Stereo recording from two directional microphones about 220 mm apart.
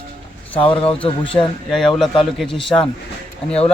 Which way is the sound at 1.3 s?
Centre (ahead or behind).